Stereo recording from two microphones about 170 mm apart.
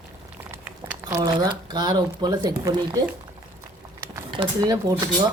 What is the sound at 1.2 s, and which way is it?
Speech, 25° right (ahead or behind).